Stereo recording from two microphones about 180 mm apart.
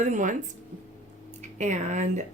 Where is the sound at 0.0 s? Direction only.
45° right (ahead or behind).